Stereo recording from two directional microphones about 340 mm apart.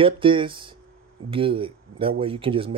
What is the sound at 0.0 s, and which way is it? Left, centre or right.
Speech, centre.